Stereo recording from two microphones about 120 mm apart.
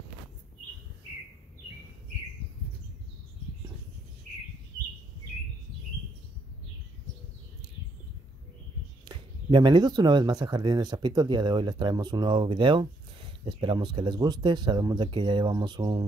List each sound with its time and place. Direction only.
9.0 s speech: 40° right (ahead or behind)